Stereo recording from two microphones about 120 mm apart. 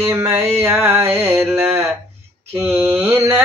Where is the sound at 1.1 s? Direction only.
15° right (ahead or behind).